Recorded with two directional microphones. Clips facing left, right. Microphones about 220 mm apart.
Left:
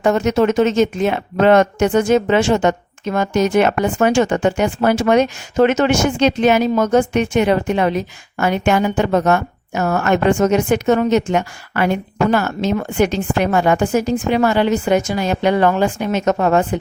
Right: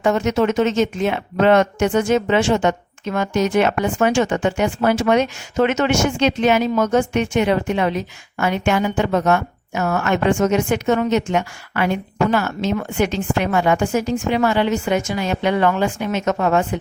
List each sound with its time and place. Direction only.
0.0 s speech: 40° left (ahead or behind)